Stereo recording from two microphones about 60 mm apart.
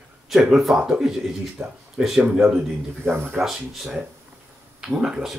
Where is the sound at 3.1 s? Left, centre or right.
Right.